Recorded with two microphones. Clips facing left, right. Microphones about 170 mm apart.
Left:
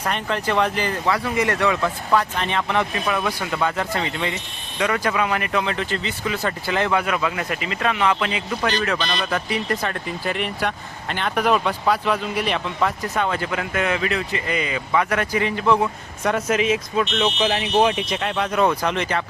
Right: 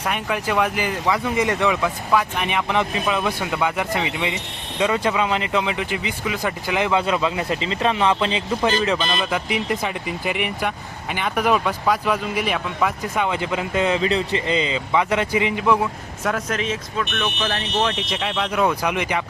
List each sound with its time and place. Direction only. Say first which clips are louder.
0.0 s speech: even; 10° right (ahead or behind)
15.8 s speech: left 1 dB; centre (ahead or behind)
18.3 s speech: left 1 dB; 5° right (ahead or behind)